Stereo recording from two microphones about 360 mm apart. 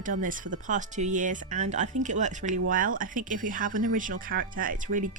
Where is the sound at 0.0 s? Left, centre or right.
Right.